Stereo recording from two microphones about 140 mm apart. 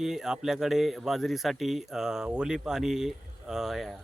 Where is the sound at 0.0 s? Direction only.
5° right (ahead or behind).